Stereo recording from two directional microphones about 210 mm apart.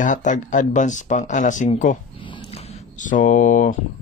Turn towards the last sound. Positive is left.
turn(degrees=40)  # may be behind; listen again after turning